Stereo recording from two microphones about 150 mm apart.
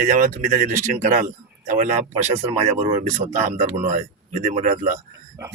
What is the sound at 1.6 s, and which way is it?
A man's voice, 50° right (ahead or behind).